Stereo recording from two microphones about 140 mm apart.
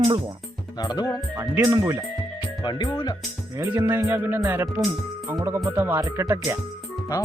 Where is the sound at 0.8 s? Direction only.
30° left (ahead or behind).